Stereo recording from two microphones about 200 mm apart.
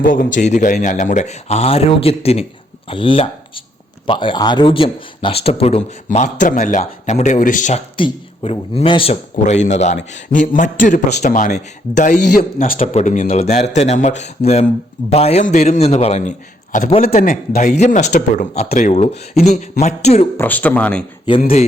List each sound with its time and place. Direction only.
0.0 s a man's voice: 45° left (ahead or behind)
7.9 s speech: 25° left (ahead or behind)
20.3 s speech: 10° left (ahead or behind)